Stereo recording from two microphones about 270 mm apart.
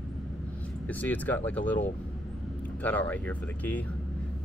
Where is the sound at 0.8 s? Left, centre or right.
Centre.